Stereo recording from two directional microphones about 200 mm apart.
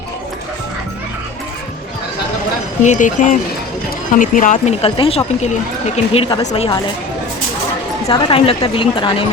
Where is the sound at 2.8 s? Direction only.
40° left (ahead or behind).